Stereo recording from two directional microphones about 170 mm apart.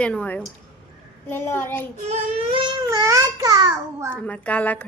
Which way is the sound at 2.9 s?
20° right (ahead or behind).